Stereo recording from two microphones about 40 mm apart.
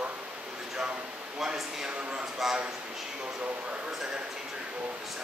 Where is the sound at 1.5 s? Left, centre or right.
Centre.